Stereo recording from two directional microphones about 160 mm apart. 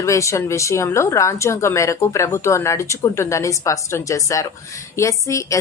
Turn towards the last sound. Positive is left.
turn(degrees=20)  # may be behind; listen again after turning